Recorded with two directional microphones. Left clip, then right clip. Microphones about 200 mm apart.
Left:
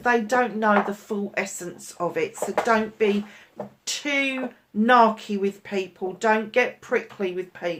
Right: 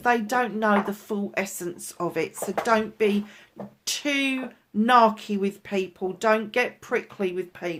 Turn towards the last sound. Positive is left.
turn(degrees=-50)  # may be behind; listen again after turning